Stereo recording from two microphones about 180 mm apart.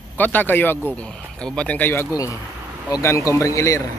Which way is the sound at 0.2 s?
10° left (ahead or behind).